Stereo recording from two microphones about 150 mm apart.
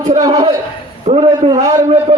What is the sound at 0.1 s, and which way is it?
Speech, 25° right (ahead or behind).